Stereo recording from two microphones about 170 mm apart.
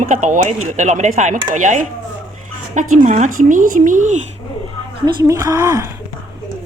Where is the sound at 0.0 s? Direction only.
45° right (ahead or behind).